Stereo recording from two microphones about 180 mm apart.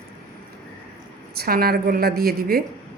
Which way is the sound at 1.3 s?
55° right (ahead or behind).